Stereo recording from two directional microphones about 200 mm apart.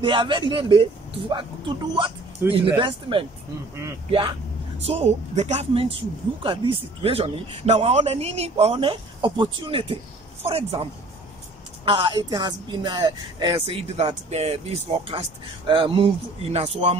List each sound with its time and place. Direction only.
0.0 s speech: 25° right (ahead or behind)
2.4 s speech: 10° right (ahead or behind)
2.8 s a woman's voice: 25° right (ahead or behind)
11.8 s speech: 25° right (ahead or behind)